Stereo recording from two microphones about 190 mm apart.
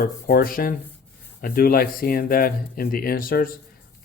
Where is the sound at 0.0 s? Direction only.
50° left (ahead or behind).